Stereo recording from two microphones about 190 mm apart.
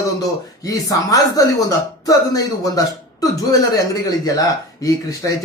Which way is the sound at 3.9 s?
20° left (ahead or behind).